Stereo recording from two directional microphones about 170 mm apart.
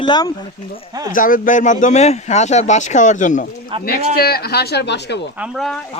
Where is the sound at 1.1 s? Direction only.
50° left (ahead or behind).